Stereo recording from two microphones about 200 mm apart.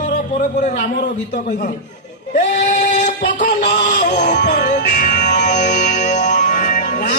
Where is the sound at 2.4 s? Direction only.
40° left (ahead or behind).